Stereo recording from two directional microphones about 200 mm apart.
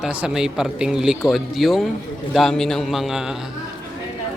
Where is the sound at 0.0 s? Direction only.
5° right (ahead or behind).